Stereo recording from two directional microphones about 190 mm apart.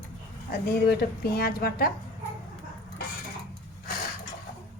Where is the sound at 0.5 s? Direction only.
50° left (ahead or behind).